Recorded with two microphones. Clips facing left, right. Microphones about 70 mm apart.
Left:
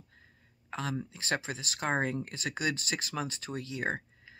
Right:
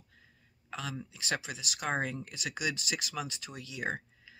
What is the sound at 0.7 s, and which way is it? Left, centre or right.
Speech, left.